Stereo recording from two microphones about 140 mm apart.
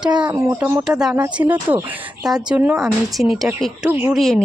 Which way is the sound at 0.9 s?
5° right (ahead or behind).